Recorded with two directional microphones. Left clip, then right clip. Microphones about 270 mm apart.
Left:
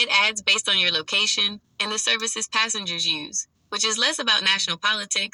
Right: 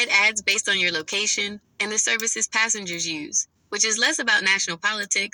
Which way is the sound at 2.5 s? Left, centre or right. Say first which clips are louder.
Left 1 dB; left.